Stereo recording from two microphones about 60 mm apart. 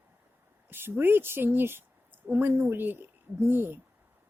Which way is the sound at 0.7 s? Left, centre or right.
Right.